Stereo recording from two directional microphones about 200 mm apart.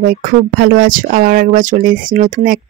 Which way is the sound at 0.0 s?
45° right (ahead or behind).